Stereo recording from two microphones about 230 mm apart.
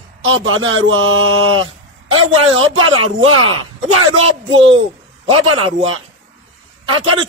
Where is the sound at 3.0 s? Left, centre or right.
Right.